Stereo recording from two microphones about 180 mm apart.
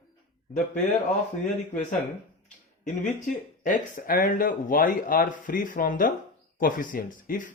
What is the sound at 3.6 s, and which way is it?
Speech, 50° left (ahead or behind).